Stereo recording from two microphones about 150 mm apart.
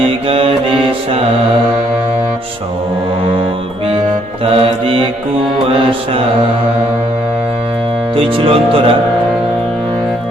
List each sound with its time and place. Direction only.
0.0 s mantra: 40° right (ahead or behind)
4.4 s mantra: 40° right (ahead or behind)
8.1 s speech: 35° right (ahead or behind)